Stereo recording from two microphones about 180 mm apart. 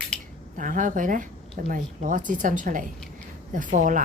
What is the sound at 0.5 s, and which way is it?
Speech, 45° right (ahead or behind).